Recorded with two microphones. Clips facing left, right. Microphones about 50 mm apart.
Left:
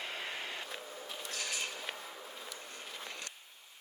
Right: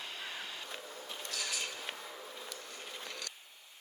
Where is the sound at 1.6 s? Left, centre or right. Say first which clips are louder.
Left 1 dB; centre.